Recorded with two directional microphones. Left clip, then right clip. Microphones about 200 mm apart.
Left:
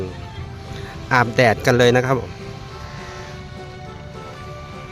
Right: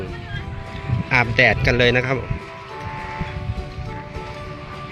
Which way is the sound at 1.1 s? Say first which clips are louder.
Left 1 dB; 30° left (ahead or behind).